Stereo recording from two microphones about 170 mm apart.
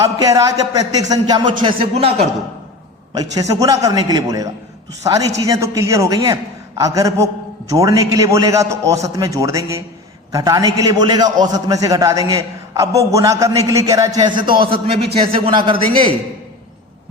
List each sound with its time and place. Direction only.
0.0 s a man's voice: 20° right (ahead or behind)
1.6 s speech: 35° right (ahead or behind)
3.2 s a man's voice: 20° right (ahead or behind)